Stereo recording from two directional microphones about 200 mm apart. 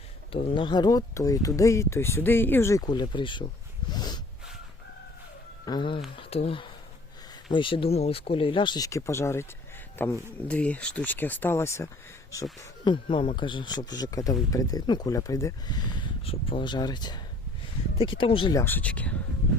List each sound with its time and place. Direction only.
0.3 s speech: 25° left (ahead or behind)
3.8 s snort: 20° left (ahead or behind)
5.6 s speech: 20° left (ahead or behind)
18.2 s speech: 25° left (ahead or behind)
18.6 s speech: 10° left (ahead or behind)